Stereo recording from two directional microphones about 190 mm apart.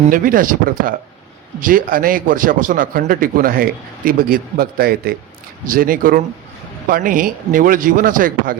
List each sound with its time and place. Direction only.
0.1 s a man's voice: 45° right (ahead or behind)